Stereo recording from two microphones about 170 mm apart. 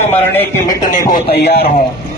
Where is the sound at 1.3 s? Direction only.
70° left (ahead or behind).